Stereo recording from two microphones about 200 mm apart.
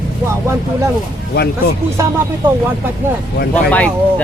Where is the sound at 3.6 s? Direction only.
5° left (ahead or behind).